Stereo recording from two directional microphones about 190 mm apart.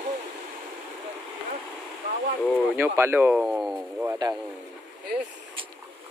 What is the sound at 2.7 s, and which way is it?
Speech, 10° right (ahead or behind).